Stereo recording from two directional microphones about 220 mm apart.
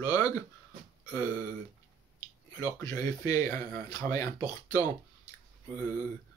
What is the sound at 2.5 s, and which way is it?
Speech, 15° left (ahead or behind).